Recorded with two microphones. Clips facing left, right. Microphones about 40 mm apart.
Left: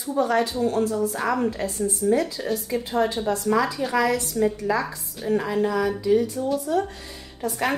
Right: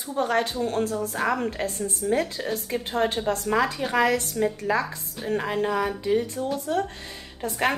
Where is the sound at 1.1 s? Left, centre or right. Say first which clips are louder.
Left 1 dB; right.